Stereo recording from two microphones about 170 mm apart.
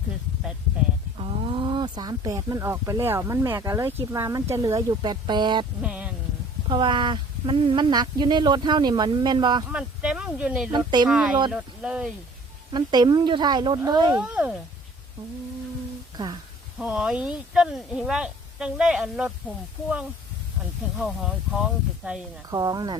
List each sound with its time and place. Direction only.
1.2 s speech: 30° right (ahead or behind)
5.8 s music: 5° right (ahead or behind)
6.7 s speech: 30° right (ahead or behind)
9.6 s speech: 5° right (ahead or behind)
10.7 s speech: 25° right (ahead or behind)
11.1 s speech: 5° right (ahead or behind)
12.7 s speech: 25° right (ahead or behind)
14.2 s speech: 5° right (ahead or behind)
16.7 s speech: 5° right (ahead or behind)
22.4 s speech: 20° right (ahead or behind)